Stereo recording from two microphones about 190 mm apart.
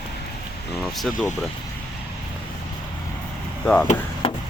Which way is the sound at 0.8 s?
Centre (ahead or behind).